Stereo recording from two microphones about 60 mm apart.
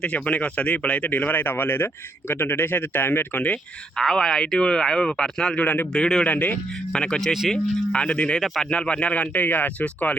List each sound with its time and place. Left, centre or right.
0.0 s speech: left
3.9 s speech: centre
5.5 s speech: left
5.9 s speech: centre
6.2 s speech: left
6.9 s speech: centre